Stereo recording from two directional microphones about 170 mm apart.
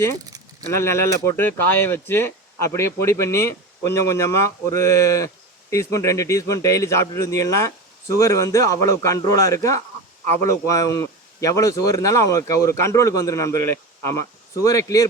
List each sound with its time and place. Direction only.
0.7 s speech: 15° left (ahead or behind)